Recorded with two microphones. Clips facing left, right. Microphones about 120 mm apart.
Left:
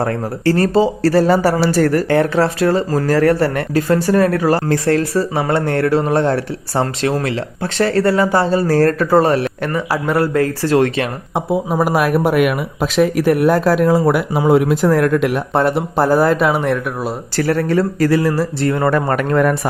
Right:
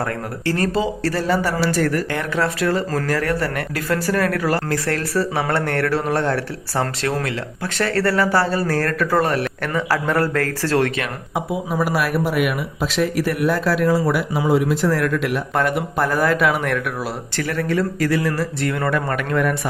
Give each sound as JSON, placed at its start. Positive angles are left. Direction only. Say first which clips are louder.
{"t": 0.0, "sound": "speech", "louder": "left 6 dB", "side_deg": 30}
{"t": 9.7, "sound": "speech", "louder": "left 2 dB", "side_deg": 15}
{"t": 15.5, "sound": "speech", "louder": "left 4 dB", "side_deg": 35}
{"t": 17.3, "sound": "speech", "louder": "left 6 dB", "side_deg": 40}